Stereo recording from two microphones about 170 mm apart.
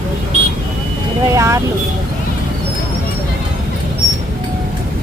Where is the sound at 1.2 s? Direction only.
20° right (ahead or behind).